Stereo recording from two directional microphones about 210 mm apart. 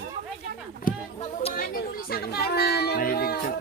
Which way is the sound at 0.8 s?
35° left (ahead or behind).